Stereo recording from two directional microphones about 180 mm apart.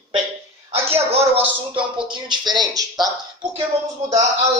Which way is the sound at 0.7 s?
35° right (ahead or behind).